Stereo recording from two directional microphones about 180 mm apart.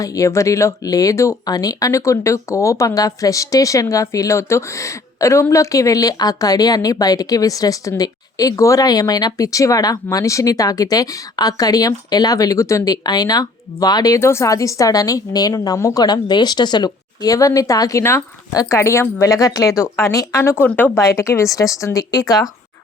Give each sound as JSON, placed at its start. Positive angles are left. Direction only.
{"t": 0.0, "sound": "speech", "side_deg": 20}